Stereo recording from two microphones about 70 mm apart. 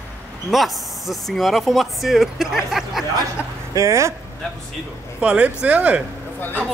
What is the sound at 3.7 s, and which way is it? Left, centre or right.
Speech, right.